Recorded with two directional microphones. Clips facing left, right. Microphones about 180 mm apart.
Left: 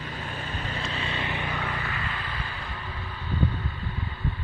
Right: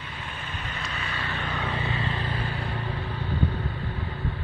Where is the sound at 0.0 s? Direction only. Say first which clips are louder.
Left 3 dB; 40° left (ahead or behind); by 1.6 s 15° left (ahead or behind).